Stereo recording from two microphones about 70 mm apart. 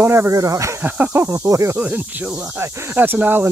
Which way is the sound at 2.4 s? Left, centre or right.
Right.